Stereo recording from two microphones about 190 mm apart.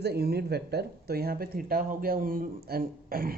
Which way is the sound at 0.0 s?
55° right (ahead or behind).